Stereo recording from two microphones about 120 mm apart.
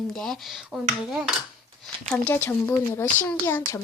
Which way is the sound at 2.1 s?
15° left (ahead or behind).